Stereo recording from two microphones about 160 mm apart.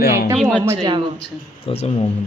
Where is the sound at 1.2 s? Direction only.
40° left (ahead or behind).